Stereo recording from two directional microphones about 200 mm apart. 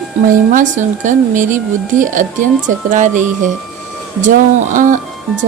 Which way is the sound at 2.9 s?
40° right (ahead or behind).